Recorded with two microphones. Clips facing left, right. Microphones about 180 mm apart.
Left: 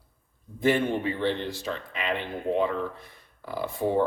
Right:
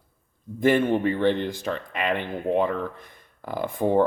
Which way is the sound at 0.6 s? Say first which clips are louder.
Right 4 dB; 50° right (ahead or behind).